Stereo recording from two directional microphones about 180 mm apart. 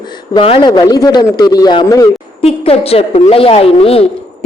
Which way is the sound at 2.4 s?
35° left (ahead or behind).